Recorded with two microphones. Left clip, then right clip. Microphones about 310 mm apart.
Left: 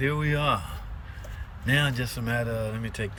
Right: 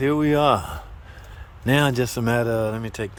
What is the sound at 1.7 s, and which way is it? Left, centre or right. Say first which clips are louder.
A man's voice: right 6 dB; centre.